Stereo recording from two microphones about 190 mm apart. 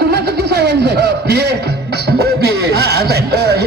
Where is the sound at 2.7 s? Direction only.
55° right (ahead or behind).